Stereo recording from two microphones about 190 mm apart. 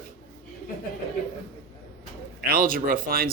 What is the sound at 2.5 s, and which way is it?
Speech, 50° right (ahead or behind).